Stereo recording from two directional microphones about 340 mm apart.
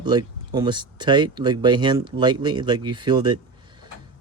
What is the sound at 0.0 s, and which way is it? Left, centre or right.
Speech, centre.